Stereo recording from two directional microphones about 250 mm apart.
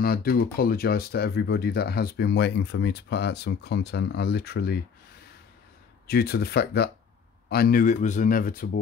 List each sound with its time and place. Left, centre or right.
0.0 s speech: left
6.0 s speech: left